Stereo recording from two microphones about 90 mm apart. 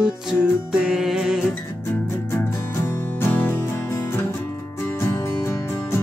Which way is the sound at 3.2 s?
25° left (ahead or behind).